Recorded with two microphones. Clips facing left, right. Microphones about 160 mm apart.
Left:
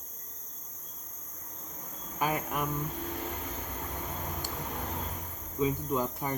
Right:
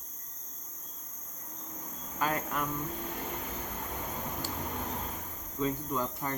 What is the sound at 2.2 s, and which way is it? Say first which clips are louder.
Speech: left 1 dB; 15° left (ahead or behind).